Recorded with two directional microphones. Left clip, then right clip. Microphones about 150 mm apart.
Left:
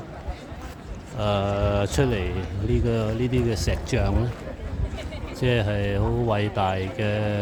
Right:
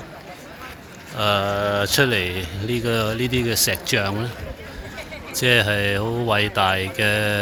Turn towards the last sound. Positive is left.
turn(degrees=0)  # may be behind; listen again after turning